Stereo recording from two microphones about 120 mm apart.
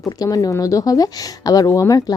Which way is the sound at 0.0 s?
30° left (ahead or behind).